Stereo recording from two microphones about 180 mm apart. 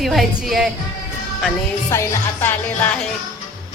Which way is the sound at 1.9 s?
15° left (ahead or behind).